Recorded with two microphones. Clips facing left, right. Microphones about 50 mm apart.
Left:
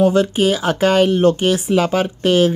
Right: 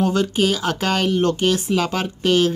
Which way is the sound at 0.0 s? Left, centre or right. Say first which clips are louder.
Left 5 dB; centre.